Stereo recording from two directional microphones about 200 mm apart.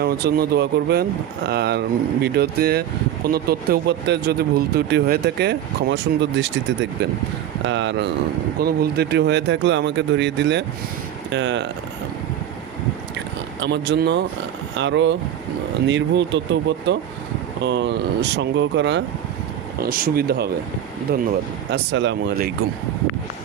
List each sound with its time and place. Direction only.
0.0 s speech: 55° right (ahead or behind)
8.5 s speech: 50° right (ahead or behind)
13.6 s speech: 60° right (ahead or behind)
19.8 s speech: 45° right (ahead or behind)
21.7 s speech: 60° right (ahead or behind)